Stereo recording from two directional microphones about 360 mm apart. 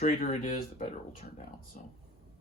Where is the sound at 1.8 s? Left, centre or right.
Left.